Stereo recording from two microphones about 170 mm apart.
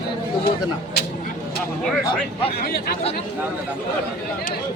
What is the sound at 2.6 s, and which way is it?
Speech, 65° left (ahead or behind).